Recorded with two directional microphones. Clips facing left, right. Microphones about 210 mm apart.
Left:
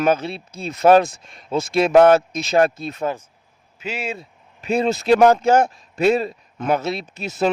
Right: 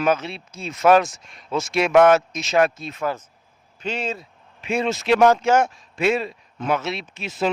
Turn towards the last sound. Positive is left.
turn(degrees=45)  # may be behind; listen again after turning